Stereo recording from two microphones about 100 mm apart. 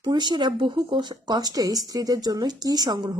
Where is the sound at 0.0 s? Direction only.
45° right (ahead or behind).